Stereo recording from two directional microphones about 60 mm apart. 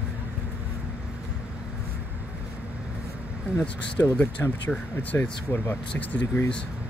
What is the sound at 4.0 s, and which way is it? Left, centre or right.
Speech, left.